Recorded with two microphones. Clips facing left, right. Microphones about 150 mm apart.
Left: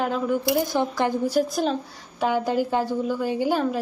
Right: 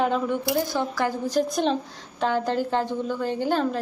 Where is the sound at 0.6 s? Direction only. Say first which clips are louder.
Left 2 dB; 15° left (ahead or behind).